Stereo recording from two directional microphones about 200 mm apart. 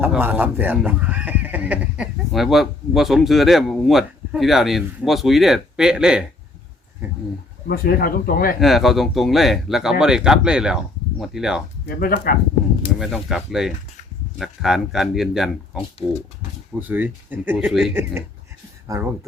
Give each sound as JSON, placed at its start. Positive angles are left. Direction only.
{"t": 0.0, "sound": "speech", "side_deg": -10}
{"t": 7.7, "sound": "speech", "side_deg": 50}
{"t": 8.6, "sound": "speech", "side_deg": 0}
{"t": 11.9, "sound": "speech", "side_deg": 45}
{"t": 13.0, "sound": "speech", "side_deg": 0}
{"t": 16.8, "sound": "speech", "side_deg": -10}